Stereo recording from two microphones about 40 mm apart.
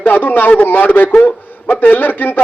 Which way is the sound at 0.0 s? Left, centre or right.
Left.